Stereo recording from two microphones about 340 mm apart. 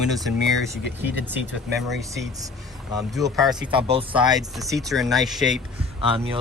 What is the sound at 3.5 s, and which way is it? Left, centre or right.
Speech, centre.